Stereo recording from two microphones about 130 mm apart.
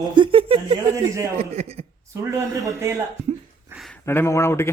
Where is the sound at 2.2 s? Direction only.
20° right (ahead or behind).